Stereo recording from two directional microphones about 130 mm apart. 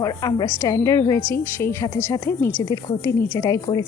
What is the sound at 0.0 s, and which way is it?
A woman's voice, 30° left (ahead or behind).